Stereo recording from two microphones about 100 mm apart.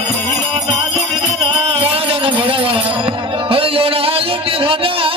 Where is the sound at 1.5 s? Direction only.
75° right (ahead or behind).